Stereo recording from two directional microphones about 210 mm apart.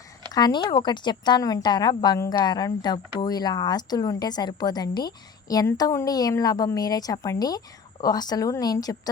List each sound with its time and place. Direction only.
0.3 s a woman's voice: 20° left (ahead or behind)